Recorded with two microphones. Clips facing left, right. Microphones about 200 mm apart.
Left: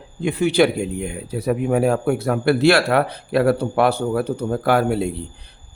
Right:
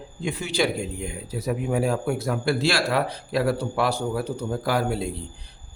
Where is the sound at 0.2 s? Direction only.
60° left (ahead or behind).